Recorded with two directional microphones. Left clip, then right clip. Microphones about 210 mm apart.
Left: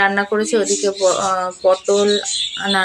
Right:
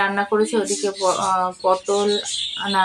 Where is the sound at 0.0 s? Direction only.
20° left (ahead or behind).